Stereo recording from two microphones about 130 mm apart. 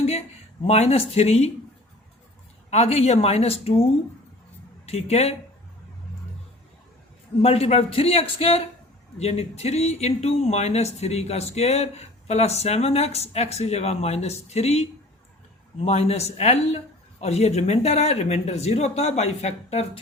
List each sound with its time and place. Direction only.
0.6 s speech: 50° left (ahead or behind)
2.6 s speech: 55° left (ahead or behind)
4.9 s speech: 55° left (ahead or behind)
7.4 s speech: 50° left (ahead or behind)